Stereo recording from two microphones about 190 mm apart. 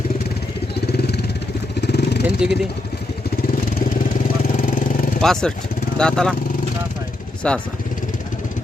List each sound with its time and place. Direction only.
0.9 s vehicle: 60° left (ahead or behind)
2.2 s vehicle: 5° right (ahead or behind)
4.5 s vehicle: 45° left (ahead or behind)
5.2 s speech: 5° left (ahead or behind)
7.4 s speech: 5° left (ahead or behind)